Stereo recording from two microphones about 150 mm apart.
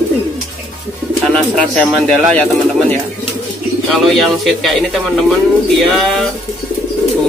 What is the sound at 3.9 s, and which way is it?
A man's voice, centre (ahead or behind).